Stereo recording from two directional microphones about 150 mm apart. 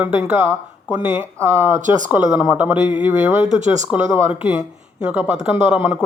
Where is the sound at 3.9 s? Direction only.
10° right (ahead or behind).